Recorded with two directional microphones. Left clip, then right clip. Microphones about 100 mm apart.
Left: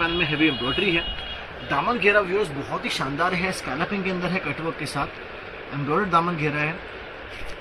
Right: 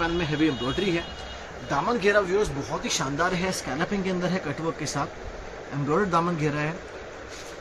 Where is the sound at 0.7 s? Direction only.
30° right (ahead or behind).